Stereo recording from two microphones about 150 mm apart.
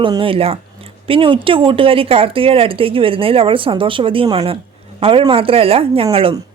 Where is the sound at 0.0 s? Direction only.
35° right (ahead or behind).